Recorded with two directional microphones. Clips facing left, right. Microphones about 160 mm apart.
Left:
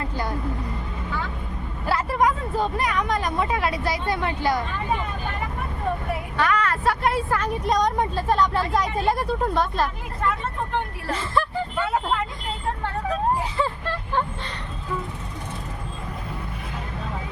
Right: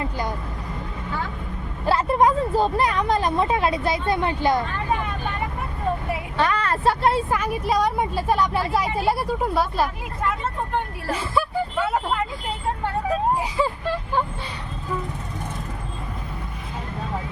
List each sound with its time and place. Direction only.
1.9 s speech: 25° right (ahead or behind)
6.3 s vehicle: 30° right (ahead or behind)
7.3 s speech: 10° right (ahead or behind)